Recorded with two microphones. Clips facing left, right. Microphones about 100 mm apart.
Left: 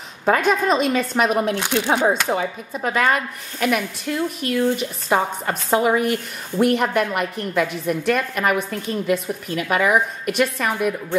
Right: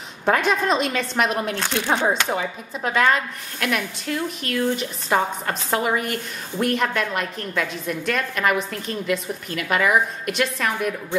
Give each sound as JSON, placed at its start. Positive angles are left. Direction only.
{"t": 0.2, "sound": "speech", "side_deg": 0}
{"t": 1.5, "sound": "a woman's voice", "side_deg": 15}